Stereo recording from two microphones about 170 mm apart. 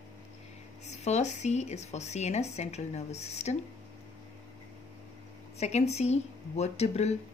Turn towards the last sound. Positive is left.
turn(degrees=40)  # may be behind; listen again after turning